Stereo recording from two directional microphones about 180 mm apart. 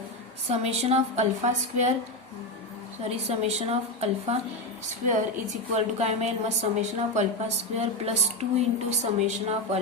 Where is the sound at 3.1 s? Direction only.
35° right (ahead or behind).